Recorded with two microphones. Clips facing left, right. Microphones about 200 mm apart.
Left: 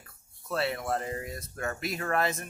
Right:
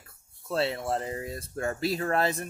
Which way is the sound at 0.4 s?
25° right (ahead or behind).